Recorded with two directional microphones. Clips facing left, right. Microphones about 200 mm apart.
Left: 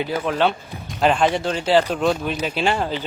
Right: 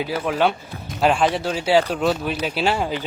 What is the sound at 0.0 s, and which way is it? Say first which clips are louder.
A man's voice: even; 5° right (ahead or behind).